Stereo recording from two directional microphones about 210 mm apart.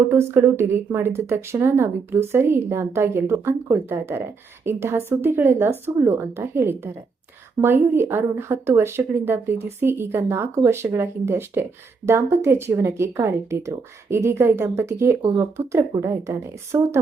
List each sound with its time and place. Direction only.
0.0 s speech: 10° right (ahead or behind)